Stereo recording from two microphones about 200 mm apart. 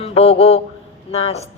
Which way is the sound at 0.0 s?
30° left (ahead or behind).